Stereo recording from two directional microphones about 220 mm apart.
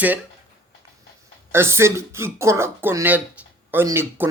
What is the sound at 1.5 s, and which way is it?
Speech, 10° right (ahead or behind).